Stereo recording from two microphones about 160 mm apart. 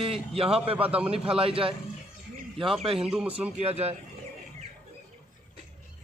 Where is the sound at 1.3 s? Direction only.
35° right (ahead or behind).